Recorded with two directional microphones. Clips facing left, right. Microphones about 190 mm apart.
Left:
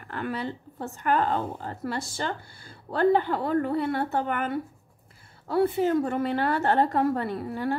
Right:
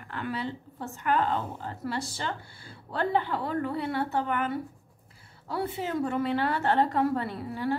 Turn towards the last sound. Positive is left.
turn(degrees=50)  # may be behind; listen again after turning